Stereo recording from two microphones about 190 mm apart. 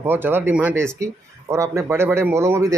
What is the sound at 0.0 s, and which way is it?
A man's voice, 10° right (ahead or behind).